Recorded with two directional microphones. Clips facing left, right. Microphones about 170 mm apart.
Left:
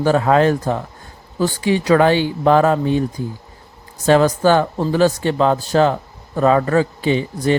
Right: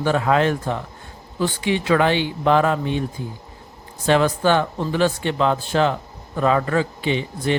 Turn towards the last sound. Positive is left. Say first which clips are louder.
# left 5 dB
turn(degrees=40)  # may be behind; listen again after turning